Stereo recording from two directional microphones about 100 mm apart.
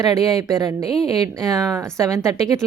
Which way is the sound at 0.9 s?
5° left (ahead or behind).